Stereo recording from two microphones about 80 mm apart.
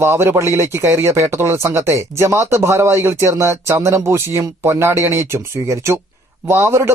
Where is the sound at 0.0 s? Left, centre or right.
Right.